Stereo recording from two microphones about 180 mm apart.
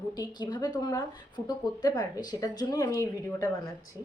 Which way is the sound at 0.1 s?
25° left (ahead or behind).